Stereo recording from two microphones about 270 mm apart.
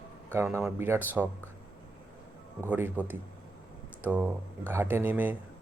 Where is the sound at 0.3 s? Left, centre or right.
Centre.